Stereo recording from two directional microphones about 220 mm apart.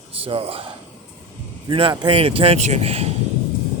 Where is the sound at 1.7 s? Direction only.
20° right (ahead or behind).